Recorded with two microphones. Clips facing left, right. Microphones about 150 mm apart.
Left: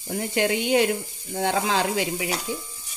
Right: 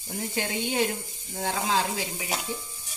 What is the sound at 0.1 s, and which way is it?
Speech, 75° left (ahead or behind).